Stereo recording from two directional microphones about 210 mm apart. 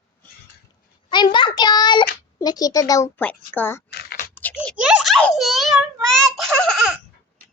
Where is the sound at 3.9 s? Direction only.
50° left (ahead or behind).